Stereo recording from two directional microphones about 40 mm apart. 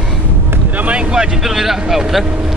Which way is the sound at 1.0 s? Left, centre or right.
Centre.